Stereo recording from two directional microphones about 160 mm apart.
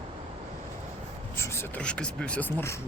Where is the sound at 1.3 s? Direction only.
15° left (ahead or behind).